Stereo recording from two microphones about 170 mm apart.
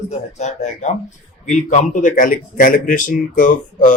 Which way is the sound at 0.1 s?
40° left (ahead or behind).